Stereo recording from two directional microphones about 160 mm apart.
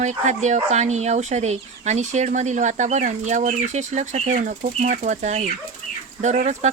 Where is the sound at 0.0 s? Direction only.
50° right (ahead or behind).